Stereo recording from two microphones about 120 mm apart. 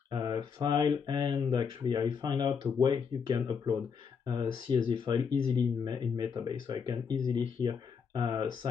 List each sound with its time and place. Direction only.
0.1 s speech: 35° right (ahead or behind)
4.6 s speech: 40° right (ahead or behind)